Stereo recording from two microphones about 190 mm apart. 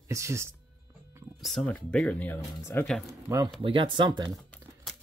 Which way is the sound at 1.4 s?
Centre (ahead or behind).